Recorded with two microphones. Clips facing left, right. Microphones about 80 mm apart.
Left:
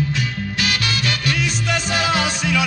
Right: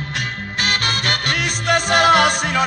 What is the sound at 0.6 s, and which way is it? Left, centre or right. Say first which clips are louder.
Music: right 2 dB; right.